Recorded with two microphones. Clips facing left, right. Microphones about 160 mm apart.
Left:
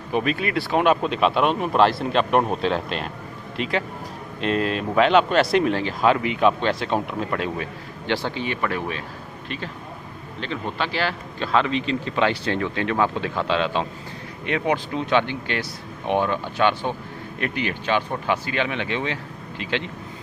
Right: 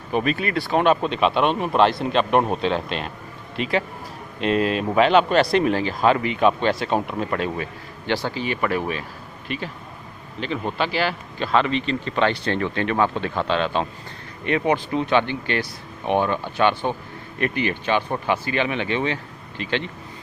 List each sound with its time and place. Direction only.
0.1 s a man's voice: centre (ahead or behind)
10.4 s a man's voice: 5° right (ahead or behind)